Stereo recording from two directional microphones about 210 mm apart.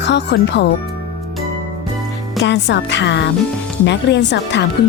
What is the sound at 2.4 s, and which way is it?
Speech, 55° left (ahead or behind).